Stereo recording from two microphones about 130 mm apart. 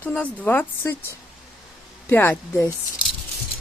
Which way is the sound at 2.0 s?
15° left (ahead or behind).